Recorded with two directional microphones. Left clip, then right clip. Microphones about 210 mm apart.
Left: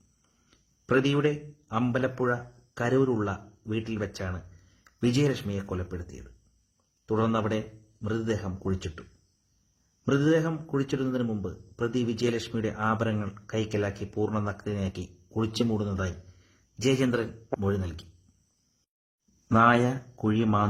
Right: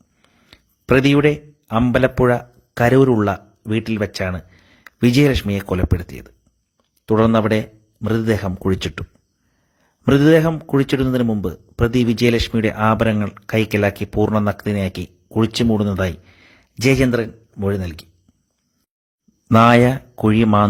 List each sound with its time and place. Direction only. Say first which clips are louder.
0.2 s a man's voice: right 18 dB; 40° right (ahead or behind)
10.1 s speech: right 12 dB; 40° right (ahead or behind)
19.5 s speech: right 10 dB; 35° right (ahead or behind)